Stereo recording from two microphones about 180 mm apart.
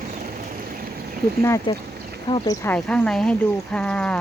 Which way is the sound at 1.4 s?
15° left (ahead or behind).